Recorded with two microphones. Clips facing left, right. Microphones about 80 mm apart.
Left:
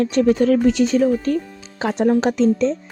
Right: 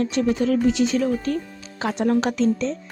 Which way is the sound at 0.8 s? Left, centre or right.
Left.